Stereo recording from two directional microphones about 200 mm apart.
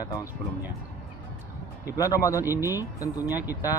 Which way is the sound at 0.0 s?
15° left (ahead or behind).